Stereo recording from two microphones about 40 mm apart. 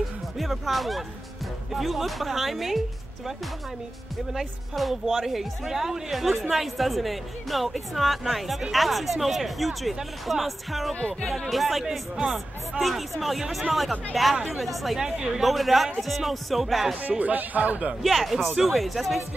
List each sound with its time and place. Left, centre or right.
0.4 s speech: centre
4.3 s speech: centre
11.0 s speech: left
11.4 s speech: centre
15.0 s a woman's voice: centre
15.4 s speech: centre
17.2 s speech: right
18.0 s speech: centre